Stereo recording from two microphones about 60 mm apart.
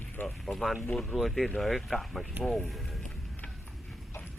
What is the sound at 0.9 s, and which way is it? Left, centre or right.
Speech, centre.